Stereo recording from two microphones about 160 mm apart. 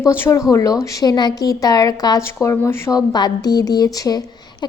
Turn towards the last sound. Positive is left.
turn(degrees=25)  # may be behind; listen again after turning